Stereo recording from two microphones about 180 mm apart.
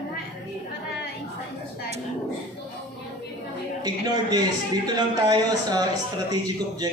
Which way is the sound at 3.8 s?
20° right (ahead or behind).